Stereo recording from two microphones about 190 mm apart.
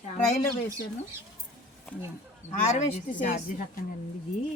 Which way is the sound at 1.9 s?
10° left (ahead or behind).